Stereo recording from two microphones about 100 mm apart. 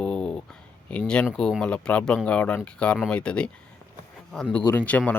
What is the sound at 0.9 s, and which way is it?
Speech, 10° left (ahead or behind).